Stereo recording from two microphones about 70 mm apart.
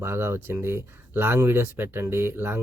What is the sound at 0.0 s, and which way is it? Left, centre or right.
Speech, right.